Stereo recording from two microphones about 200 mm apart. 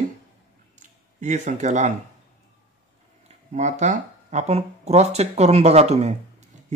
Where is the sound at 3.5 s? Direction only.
35° right (ahead or behind).